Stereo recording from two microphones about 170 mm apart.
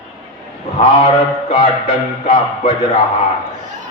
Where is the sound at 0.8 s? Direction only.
35° left (ahead or behind).